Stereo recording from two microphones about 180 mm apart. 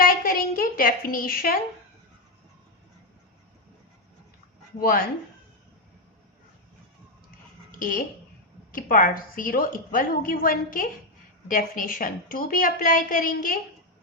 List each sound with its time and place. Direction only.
0.0 s a sound: 55° left (ahead or behind)
4.8 s speech: 55° left (ahead or behind)
7.8 s a woman's voice: 50° left (ahead or behind)